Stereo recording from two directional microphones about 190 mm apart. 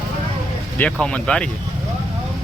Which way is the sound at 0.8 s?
5° left (ahead or behind).